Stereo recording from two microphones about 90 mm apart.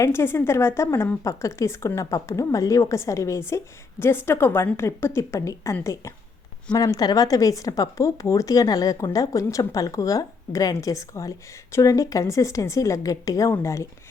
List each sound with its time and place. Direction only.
0.0 s a woman's voice: 30° left (ahead or behind)